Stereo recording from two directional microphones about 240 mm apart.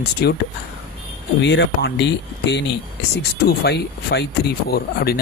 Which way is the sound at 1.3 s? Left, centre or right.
Left.